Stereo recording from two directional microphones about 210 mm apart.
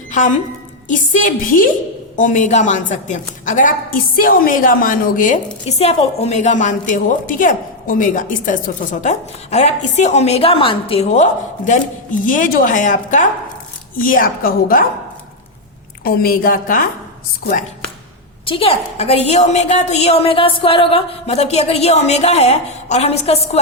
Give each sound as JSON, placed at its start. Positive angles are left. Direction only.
{"t": 0.1, "sound": "a woman's voice", "side_deg": 35}
{"t": 16.0, "sound": "a woman's voice", "side_deg": 45}
{"t": 18.4, "sound": "a woman's voice", "side_deg": 25}